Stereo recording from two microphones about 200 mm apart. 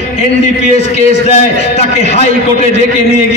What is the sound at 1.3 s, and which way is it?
Speech, 35° left (ahead or behind).